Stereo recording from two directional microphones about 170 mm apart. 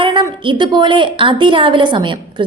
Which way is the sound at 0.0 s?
30° right (ahead or behind).